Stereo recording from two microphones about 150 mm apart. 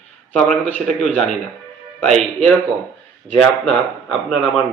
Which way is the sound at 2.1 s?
Centre (ahead or behind).